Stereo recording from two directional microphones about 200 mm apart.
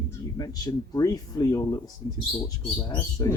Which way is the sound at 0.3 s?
20° left (ahead or behind).